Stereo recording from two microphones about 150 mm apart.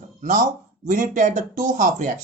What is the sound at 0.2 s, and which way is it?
Speech, 60° right (ahead or behind).